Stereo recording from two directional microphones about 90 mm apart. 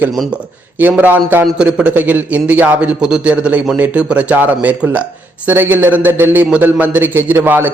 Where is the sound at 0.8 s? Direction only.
20° right (ahead or behind).